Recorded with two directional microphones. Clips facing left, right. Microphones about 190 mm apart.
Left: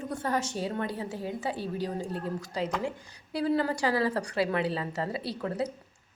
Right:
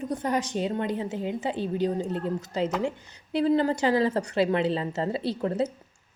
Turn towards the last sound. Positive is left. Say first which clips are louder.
# right 5 dB
turn(degrees=-25)  # may be behind; listen again after turning